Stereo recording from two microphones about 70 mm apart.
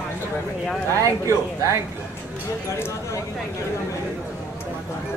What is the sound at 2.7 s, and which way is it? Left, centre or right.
Speech, left.